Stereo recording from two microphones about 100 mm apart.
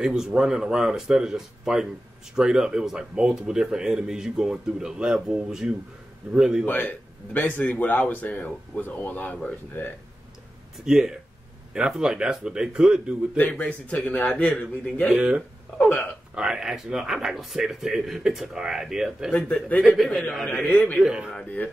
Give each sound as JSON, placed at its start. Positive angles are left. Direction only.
{"t": 0.0, "sound": "speech", "side_deg": -5}
{"t": 6.6, "sound": "speech", "side_deg": 15}
{"t": 10.9, "sound": "speech", "side_deg": -5}
{"t": 13.4, "sound": "speech", "side_deg": 15}
{"t": 15.1, "sound": "speech", "side_deg": -10}
{"t": 15.8, "sound": "speech", "side_deg": 10}
{"t": 16.3, "sound": "speech", "side_deg": -5}
{"t": 21.0, "sound": "speech", "side_deg": -10}